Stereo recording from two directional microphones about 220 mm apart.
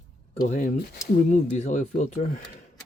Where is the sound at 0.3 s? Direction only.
35° left (ahead or behind).